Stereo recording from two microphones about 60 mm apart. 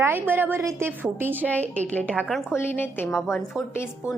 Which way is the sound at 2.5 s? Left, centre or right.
Left.